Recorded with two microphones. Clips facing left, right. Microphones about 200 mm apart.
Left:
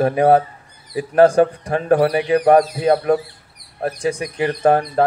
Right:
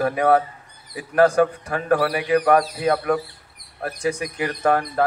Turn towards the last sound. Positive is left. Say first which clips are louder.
# left 5 dB
turn(degrees=30)  # may be behind; listen again after turning